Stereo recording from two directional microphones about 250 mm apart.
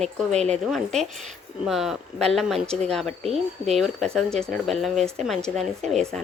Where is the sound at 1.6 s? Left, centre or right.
Centre.